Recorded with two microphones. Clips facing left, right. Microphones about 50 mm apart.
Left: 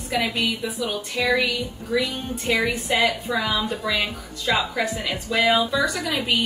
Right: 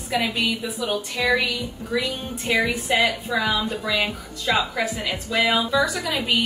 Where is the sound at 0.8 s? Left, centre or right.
Right.